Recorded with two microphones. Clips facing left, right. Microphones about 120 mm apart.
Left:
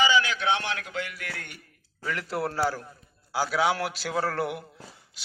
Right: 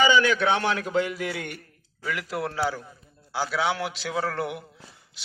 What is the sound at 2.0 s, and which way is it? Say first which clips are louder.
A man's voice: even; centre (ahead or behind).